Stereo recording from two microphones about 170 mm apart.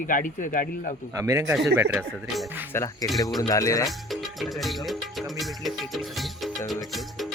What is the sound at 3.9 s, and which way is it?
Music, centre (ahead or behind).